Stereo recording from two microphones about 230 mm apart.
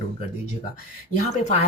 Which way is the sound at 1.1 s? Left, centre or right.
Left.